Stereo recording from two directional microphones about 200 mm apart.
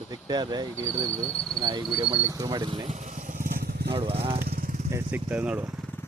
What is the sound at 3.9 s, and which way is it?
Speech, 30° right (ahead or behind).